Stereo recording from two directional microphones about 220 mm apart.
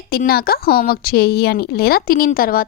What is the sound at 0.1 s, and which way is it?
A woman's voice, 45° left (ahead or behind).